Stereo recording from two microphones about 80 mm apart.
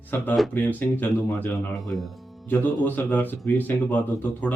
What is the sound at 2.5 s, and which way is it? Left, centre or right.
Speech, left.